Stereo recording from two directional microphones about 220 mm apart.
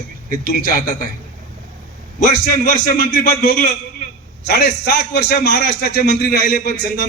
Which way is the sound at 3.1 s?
40° left (ahead or behind).